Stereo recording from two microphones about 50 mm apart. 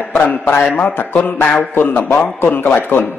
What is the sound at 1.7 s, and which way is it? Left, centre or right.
Speech, left.